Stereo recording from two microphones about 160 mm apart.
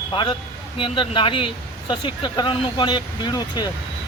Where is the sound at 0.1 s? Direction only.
30° left (ahead or behind).